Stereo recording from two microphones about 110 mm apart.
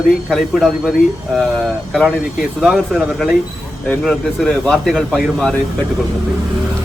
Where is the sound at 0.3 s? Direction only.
Centre (ahead or behind).